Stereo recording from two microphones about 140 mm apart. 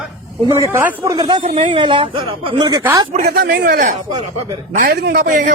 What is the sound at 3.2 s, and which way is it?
A man's voice, 90° right.